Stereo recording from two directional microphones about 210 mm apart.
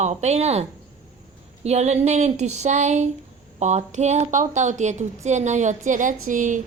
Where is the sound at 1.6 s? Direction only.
30° right (ahead or behind).